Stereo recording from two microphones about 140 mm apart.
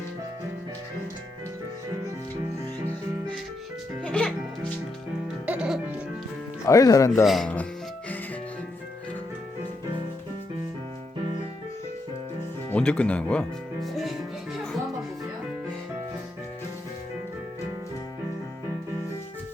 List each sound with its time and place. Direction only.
4.0 s music: 5° left (ahead or behind)
5.5 s music: 5° right (ahead or behind)
6.7 s speech: 25° left (ahead or behind)
7.3 s speech: 5° left (ahead or behind)
12.7 s speech: 10° left (ahead or behind)
13.8 s music: centre (ahead or behind)